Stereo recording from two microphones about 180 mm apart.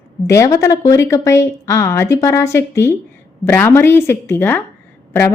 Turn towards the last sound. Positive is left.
turn(degrees=15)  # may be behind; listen again after turning